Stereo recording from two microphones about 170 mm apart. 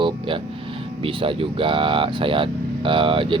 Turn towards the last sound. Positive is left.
turn(degrees=-30)  # may be behind; listen again after turning